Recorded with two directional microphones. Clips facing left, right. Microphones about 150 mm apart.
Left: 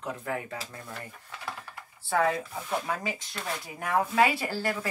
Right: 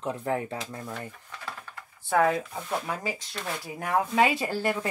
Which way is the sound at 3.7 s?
25° right (ahead or behind).